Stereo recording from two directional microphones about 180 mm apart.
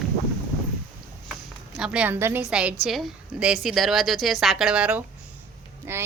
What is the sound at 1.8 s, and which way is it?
A woman's voice, 5° right (ahead or behind).